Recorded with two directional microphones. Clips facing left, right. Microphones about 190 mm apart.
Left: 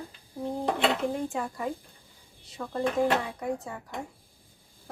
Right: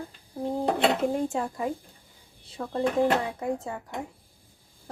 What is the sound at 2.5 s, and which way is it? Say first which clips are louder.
Speech: right 2 dB; 25° right (ahead or behind).